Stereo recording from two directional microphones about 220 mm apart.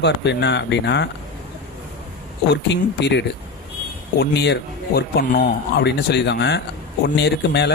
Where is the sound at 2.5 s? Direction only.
50° left (ahead or behind).